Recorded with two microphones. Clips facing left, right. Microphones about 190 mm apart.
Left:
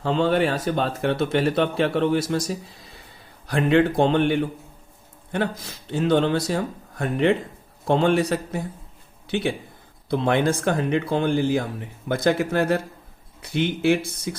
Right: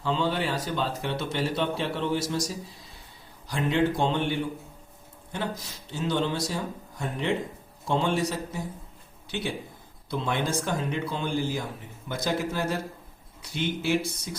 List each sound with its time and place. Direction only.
0.0 s speech: 60° left (ahead or behind)
10.1 s speech: 60° left (ahead or behind)